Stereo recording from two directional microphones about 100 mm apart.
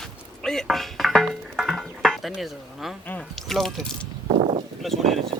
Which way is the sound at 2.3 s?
Centre (ahead or behind).